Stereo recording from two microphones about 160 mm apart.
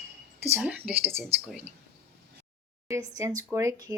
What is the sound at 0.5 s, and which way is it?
Speech, 10° right (ahead or behind).